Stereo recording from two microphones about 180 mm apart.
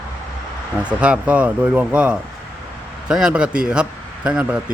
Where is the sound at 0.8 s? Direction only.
5° right (ahead or behind).